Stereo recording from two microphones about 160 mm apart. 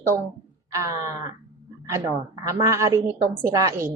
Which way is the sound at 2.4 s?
20° right (ahead or behind).